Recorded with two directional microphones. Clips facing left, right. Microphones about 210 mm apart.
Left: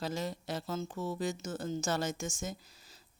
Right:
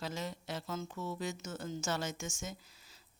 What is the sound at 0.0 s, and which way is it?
Speech, 35° left (ahead or behind).